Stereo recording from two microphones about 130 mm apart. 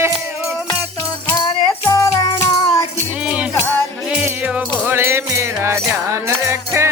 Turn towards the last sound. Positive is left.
turn(degrees=-20)  # may be behind; listen again after turning